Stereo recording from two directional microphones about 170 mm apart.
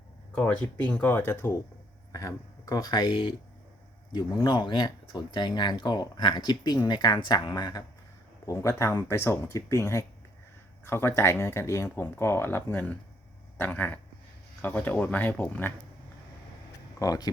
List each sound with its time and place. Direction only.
0.3 s speech: 10° left (ahead or behind)
17.0 s speech: 20° left (ahead or behind)